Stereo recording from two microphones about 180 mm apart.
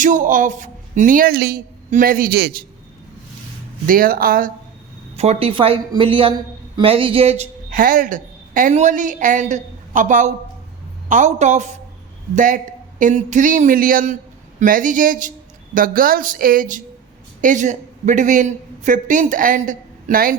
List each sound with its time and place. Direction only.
0.0 s a man's voice: 45° right (ahead or behind)
3.8 s speech: 50° right (ahead or behind)
5.1 s a man's voice: 35° right (ahead or behind)
7.7 s a woman's voice: 50° right (ahead or behind)